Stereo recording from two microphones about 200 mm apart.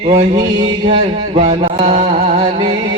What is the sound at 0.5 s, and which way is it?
Chant, 20° right (ahead or behind).